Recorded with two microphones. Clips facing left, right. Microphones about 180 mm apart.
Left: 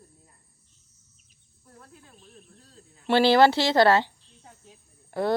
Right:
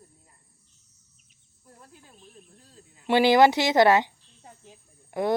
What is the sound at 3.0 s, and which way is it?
A woman's voice, 15° right (ahead or behind).